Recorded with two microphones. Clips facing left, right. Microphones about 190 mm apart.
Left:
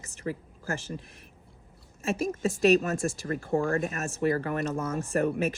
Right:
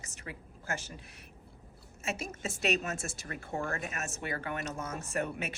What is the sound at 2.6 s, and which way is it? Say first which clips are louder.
Speech: left 10 dB; 40° left (ahead or behind).